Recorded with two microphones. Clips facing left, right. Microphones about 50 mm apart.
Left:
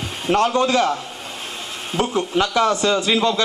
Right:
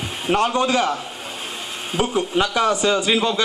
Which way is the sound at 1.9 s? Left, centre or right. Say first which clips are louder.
Even; centre.